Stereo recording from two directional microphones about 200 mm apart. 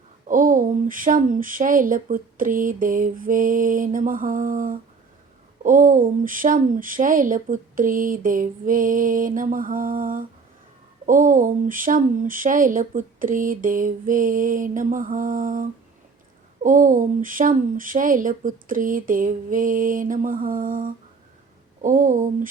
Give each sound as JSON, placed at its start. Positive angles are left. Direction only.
{"t": 0.3, "sound": "speech", "side_deg": -40}